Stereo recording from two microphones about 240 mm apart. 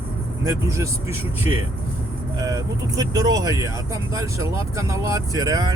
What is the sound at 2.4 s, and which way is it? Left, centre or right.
Speech, centre.